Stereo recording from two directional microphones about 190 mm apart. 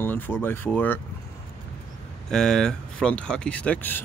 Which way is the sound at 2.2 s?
5° left (ahead or behind).